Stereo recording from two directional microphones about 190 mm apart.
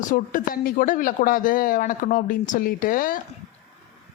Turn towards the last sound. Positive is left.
turn(degrees=45)  # may be behind; listen again after turning